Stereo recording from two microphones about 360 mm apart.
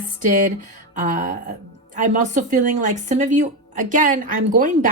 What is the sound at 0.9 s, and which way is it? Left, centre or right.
Speech, right.